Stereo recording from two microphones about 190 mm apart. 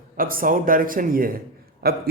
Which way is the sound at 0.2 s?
50° right (ahead or behind).